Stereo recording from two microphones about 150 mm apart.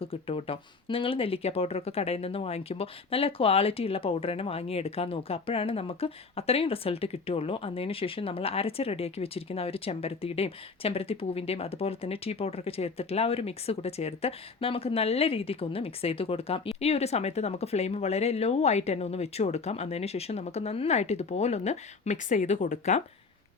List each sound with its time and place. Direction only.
0.0 s speech: 40° left (ahead or behind); by 23.0 s 60° left (ahead or behind)